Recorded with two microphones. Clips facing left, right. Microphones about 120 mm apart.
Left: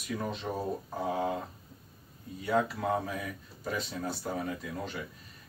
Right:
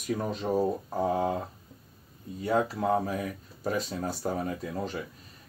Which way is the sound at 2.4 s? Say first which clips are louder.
Right 2 dB; 35° right (ahead or behind).